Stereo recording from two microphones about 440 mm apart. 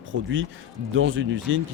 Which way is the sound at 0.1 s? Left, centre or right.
Right.